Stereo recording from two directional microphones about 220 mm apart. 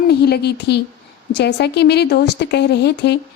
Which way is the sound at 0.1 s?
45° left (ahead or behind).